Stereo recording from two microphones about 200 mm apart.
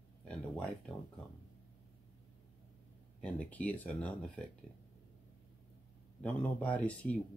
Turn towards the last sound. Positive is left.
turn(degrees=5)  # may be behind; listen again after turning